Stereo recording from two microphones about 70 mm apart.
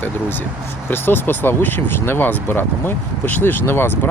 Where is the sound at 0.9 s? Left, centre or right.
Left.